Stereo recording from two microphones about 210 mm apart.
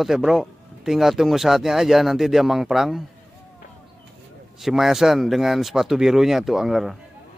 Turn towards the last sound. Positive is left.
turn(degrees=0)  # may be behind; listen again after turning